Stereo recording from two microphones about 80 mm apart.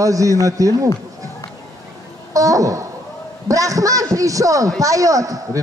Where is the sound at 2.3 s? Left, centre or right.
Right.